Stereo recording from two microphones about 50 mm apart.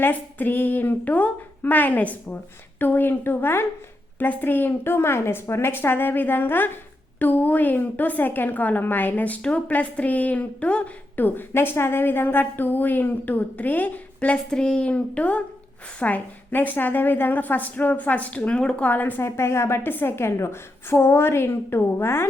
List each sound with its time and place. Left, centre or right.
0.0 s a woman's voice: left
4.2 s a woman's voice: left
11.2 s a woman's voice: left
11.5 s a woman's voice: left
14.5 s a woman's voice: centre
18.9 s a woman's voice: left
19.2 s a woman's voice: left
19.8 s a woman's voice: left
20.1 s a woman's voice: left